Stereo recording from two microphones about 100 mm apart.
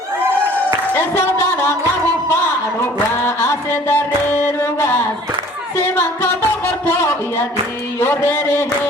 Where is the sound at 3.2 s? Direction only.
20° left (ahead or behind).